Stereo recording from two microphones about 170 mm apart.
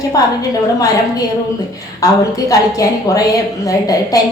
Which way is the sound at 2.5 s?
20° left (ahead or behind).